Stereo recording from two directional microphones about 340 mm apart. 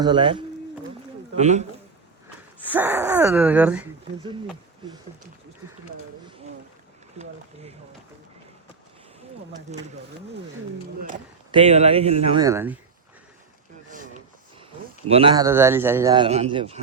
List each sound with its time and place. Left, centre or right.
0.0 s a man's voice: centre
2.6 s speech: centre
7.2 s speech: centre
9.7 s speech: centre
11.1 s a man's voice: centre
13.9 s a sound: right
15.0 s a man's voice: centre